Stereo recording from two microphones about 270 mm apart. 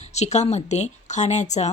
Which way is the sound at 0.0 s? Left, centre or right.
Left.